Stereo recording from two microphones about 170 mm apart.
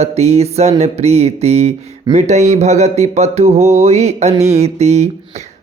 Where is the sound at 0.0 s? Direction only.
40° right (ahead or behind).